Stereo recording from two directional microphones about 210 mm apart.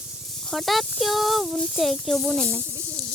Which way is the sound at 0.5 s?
Centre (ahead or behind).